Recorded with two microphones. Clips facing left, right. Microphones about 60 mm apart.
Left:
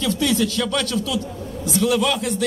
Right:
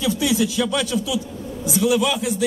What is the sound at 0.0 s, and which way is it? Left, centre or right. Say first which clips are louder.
A man's voice: even; centre.